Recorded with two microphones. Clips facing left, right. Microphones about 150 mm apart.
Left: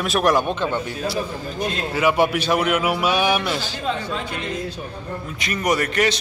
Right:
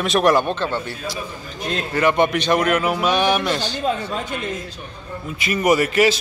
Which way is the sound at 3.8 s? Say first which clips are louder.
Right 2 dB; 45° right (ahead or behind).